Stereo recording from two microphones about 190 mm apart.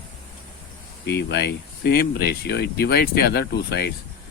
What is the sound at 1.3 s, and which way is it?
Speech, 60° left (ahead or behind).